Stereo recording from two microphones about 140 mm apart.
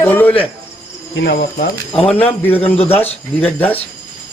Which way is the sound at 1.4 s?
80° left.